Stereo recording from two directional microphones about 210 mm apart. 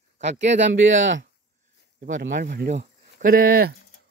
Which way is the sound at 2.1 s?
40° right (ahead or behind).